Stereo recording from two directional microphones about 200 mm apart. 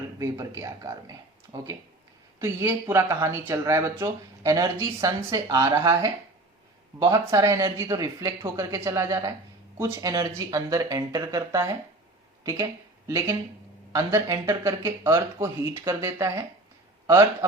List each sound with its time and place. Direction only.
0.2 s speech: 15° right (ahead or behind)
2.4 s speech: 15° right (ahead or behind)